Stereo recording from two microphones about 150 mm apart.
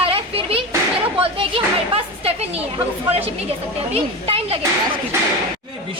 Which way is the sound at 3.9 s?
40° right (ahead or behind).